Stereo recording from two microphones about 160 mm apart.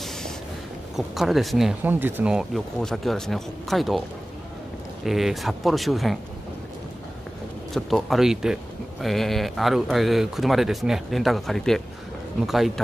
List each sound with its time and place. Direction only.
0.9 s speech: centre (ahead or behind)
5.0 s speech: centre (ahead or behind)
7.7 s speech: centre (ahead or behind)